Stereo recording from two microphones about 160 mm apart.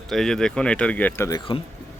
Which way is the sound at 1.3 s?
30° left (ahead or behind).